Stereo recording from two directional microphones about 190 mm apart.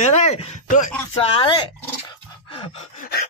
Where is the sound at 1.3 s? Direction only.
25° left (ahead or behind).